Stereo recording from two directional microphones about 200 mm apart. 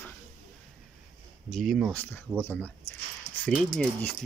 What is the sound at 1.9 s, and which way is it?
Speech, 10° left (ahead or behind).